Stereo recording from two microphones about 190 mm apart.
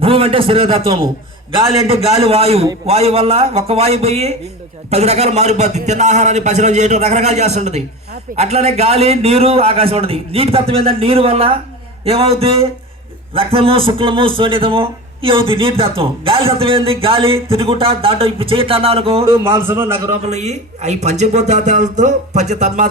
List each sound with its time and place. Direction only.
0.0 s a man's voice: 30° right (ahead or behind)
2.1 s a man's voice: 30° right (ahead or behind)
19.2 s a man's voice: 15° right (ahead or behind)
20.2 s a man's voice: 35° right (ahead or behind)